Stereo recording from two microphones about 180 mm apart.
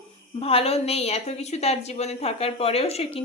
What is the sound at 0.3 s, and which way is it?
Speech, 30° left (ahead or behind).